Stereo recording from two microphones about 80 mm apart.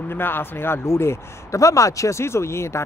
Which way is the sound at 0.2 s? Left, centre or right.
Left.